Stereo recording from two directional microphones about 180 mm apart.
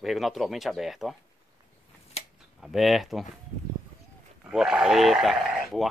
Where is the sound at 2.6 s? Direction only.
Centre (ahead or behind).